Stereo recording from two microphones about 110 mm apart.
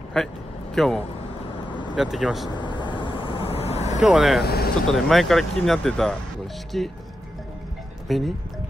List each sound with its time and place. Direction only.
0.2 s speech: 5° left (ahead or behind)
2.5 s vehicle: 45° left (ahead or behind); by 4.0 s 80° left
4.0 s speech: 5° right (ahead or behind)
8.1 s speech: centre (ahead or behind)